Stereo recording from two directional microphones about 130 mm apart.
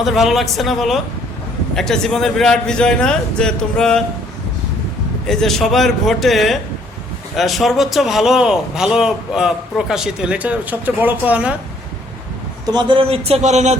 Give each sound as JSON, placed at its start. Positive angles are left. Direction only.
{"t": 0.0, "sound": "a man's voice", "side_deg": 0}
{"t": 5.2, "sound": "a man's voice", "side_deg": 5}
{"t": 12.6, "sound": "a man's voice", "side_deg": -35}